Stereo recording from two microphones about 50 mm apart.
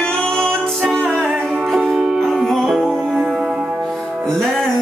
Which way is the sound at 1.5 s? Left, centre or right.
Centre.